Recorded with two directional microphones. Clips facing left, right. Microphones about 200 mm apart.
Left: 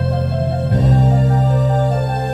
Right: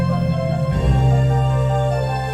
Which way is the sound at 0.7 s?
40° left (ahead or behind).